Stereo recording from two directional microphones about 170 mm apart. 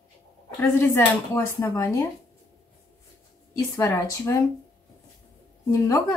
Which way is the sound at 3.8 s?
20° left (ahead or behind).